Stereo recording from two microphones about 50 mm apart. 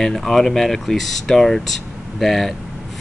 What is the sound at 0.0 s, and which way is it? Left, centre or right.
Speech, centre.